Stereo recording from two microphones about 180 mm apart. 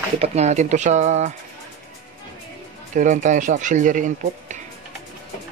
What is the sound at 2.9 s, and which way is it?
Speech, 45° right (ahead or behind).